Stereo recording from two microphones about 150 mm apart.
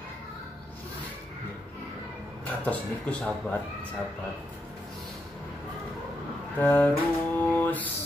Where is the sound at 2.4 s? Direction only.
10° left (ahead or behind).